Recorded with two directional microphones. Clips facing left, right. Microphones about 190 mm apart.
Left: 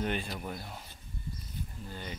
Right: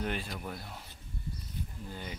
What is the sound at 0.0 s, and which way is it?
Speech, centre (ahead or behind).